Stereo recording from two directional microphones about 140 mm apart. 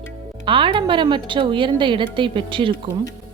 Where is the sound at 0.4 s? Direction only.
35° right (ahead or behind).